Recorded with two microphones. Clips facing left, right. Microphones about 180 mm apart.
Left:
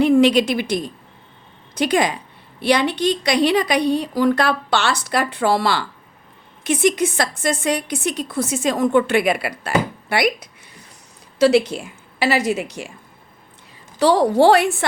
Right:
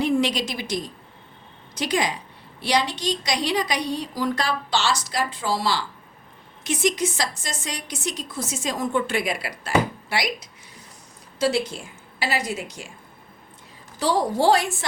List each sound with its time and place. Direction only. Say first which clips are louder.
0.0 s a woman's voice: left 8 dB; 60° left (ahead or behind)
11.3 s a woman's voice: left 8 dB; 70° left (ahead or behind)
14.0 s a woman's voice: left 7 dB; 70° left (ahead or behind)